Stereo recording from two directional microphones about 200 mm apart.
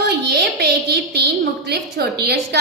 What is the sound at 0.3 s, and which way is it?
A woman's voice, 55° right (ahead or behind).